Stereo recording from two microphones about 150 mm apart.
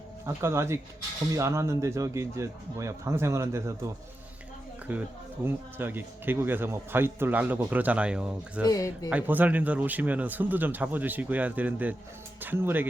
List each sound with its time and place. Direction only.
0.3 s a man's voice: 20° right (ahead or behind)
5.5 s a man's voice: 15° right (ahead or behind)
8.6 s speech: 25° left (ahead or behind)
9.0 s a man's voice: 10° right (ahead or behind)